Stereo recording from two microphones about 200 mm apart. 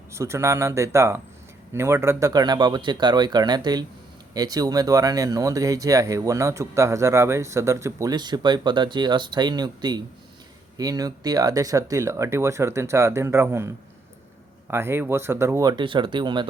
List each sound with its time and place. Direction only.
0.1 s speech: 15° right (ahead or behind)